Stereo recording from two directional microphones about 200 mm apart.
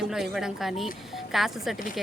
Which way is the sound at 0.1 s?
Centre (ahead or behind).